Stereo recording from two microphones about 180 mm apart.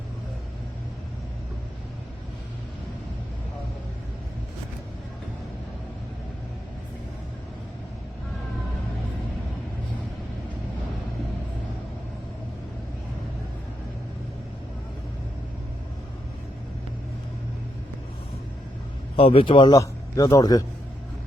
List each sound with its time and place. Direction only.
19.1 s a man's voice: 30° left (ahead or behind)